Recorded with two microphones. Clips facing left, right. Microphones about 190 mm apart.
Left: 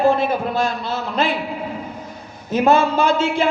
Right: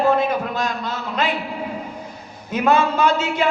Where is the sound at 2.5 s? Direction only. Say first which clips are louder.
Left 2 dB; 25° left (ahead or behind).